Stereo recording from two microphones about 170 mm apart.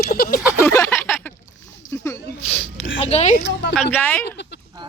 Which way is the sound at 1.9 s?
15° left (ahead or behind).